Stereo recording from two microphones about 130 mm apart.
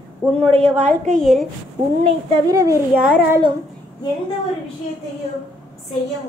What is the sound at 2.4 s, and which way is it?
Speech, 25° right (ahead or behind).